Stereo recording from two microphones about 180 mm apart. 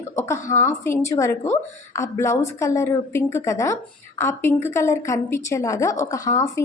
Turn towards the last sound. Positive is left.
turn(degrees=15)  # may be behind; listen again after turning